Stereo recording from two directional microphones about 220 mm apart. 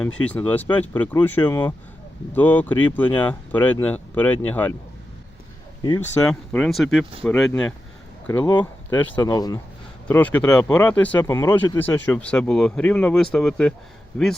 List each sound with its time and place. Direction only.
0.0 s speech: 5° left (ahead or behind)
6.2 s speech: 5° left (ahead or behind)
8.3 s speech: 15° left (ahead or behind)